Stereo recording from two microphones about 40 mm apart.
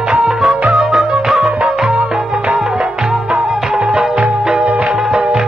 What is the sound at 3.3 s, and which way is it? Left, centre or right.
Music, right.